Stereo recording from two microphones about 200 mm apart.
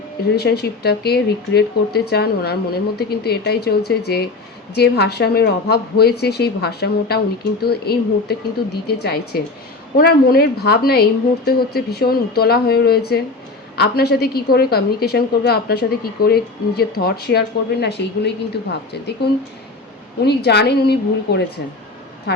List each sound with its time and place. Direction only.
0.3 s a woman's voice: 55° left (ahead or behind)